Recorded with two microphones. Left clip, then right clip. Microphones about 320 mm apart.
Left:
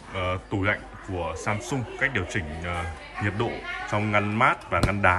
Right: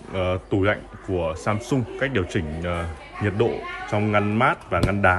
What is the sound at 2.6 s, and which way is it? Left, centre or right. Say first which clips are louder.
Speech: right 3 dB; centre.